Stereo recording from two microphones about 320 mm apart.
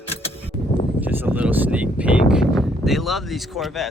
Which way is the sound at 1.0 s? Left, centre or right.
Centre.